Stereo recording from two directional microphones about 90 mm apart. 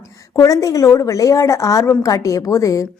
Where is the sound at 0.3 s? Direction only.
40° left (ahead or behind).